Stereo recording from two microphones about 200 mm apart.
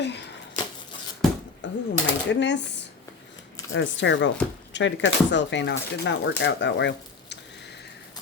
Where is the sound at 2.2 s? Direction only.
60° left (ahead or behind).